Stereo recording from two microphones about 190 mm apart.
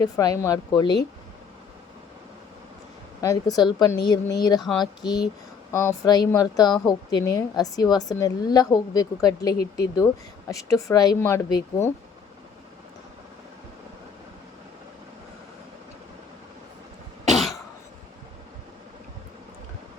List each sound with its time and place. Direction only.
0.0 s a woman's voice: 20° left (ahead or behind)
3.2 s a woman's voice: 20° left (ahead or behind)
17.2 s cough: centre (ahead or behind)